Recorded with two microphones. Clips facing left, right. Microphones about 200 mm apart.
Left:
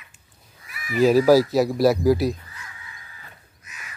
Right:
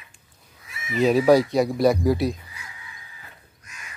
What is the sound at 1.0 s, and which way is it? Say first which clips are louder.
Speech: left 2 dB; centre (ahead or behind).